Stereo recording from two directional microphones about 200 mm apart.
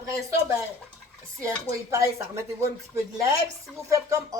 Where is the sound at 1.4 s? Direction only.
15° right (ahead or behind).